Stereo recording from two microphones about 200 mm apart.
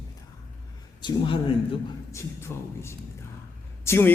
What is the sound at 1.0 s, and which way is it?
Speech, 25° left (ahead or behind).